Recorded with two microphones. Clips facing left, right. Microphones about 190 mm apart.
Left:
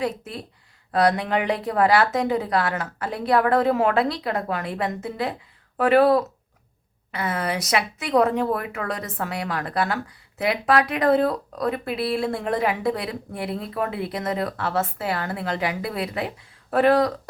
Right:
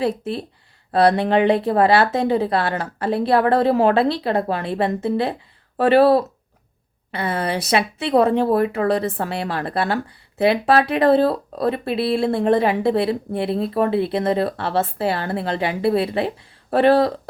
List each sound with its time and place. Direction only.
0.0 s speech: 30° right (ahead or behind)